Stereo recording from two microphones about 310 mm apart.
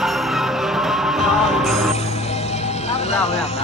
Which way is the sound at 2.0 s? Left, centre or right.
Centre.